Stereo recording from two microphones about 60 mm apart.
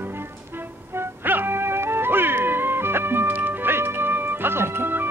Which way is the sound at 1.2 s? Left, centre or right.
Right.